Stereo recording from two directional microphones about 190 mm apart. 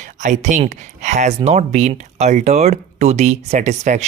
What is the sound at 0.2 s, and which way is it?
Speech, 40° right (ahead or behind).